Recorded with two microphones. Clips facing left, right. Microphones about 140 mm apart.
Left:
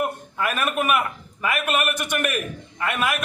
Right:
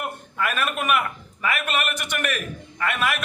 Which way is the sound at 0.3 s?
15° left (ahead or behind).